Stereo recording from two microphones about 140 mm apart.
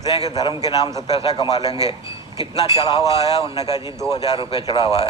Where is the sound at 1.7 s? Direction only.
45° left (ahead or behind).